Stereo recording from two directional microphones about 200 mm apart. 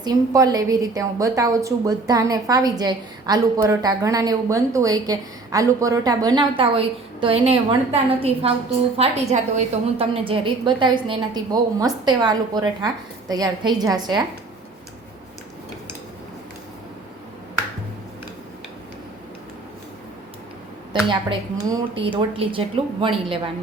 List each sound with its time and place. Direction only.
0.0 s a woman's voice: 20° right (ahead or behind)
21.1 s a woman's voice: 25° right (ahead or behind)